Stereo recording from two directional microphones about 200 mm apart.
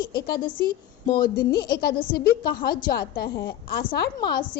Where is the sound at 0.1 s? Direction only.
50° left (ahead or behind).